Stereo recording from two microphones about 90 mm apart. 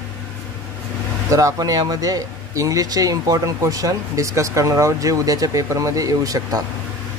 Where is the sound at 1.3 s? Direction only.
40° right (ahead or behind).